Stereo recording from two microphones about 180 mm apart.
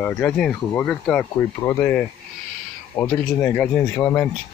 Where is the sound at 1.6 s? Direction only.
15° left (ahead or behind).